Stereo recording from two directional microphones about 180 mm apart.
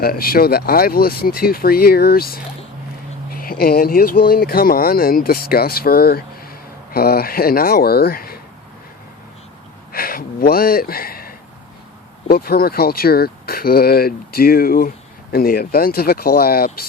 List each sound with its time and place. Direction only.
0.0 s speech: 55° left (ahead or behind)
9.9 s speech: 55° left (ahead or behind)